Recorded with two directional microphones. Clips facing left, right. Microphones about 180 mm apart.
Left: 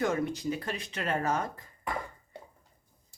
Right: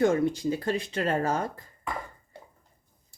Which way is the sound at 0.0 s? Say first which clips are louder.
Right 6 dB; 30° right (ahead or behind).